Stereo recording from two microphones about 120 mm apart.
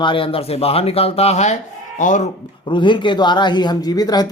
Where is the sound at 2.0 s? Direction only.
90° left.